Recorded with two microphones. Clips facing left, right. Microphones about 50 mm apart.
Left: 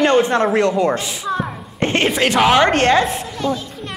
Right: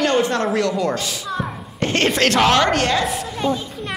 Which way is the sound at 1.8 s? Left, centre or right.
Left.